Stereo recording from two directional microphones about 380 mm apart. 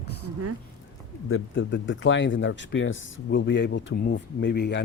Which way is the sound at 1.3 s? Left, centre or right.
Left.